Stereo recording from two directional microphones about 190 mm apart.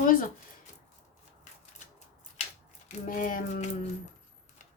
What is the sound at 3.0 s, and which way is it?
Speech, 45° left (ahead or behind).